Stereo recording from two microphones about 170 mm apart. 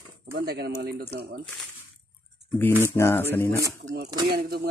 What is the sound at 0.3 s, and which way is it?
Speech, 70° right (ahead or behind).